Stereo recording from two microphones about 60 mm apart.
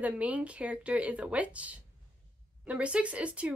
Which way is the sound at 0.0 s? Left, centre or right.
Right.